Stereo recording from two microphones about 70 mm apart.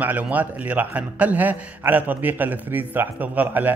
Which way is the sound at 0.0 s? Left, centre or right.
Right.